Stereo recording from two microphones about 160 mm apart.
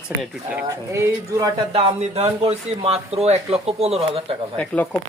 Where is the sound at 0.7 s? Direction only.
20° right (ahead or behind).